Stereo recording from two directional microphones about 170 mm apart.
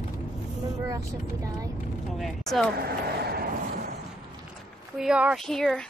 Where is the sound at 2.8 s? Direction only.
65° right (ahead or behind).